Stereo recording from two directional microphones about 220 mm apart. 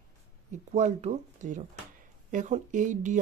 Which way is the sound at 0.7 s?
30° right (ahead or behind).